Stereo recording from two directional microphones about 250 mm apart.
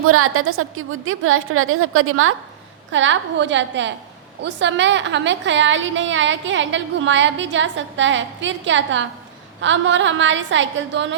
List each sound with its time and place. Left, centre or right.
0.0 s a woman's voice: right